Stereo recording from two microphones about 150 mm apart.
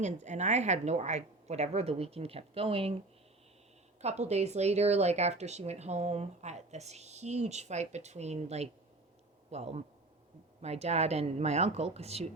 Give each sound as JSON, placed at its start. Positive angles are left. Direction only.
{"t": 0.0, "sound": "speech", "side_deg": -50}
{"t": 4.0, "sound": "speech", "side_deg": -45}